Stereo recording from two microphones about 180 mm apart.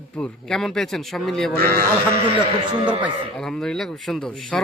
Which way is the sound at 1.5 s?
60° right (ahead or behind).